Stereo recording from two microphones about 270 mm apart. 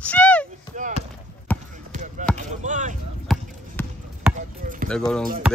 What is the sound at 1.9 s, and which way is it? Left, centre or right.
Basketball bounce, right.